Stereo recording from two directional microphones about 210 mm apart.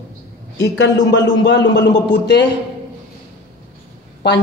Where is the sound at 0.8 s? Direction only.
60° left (ahead or behind).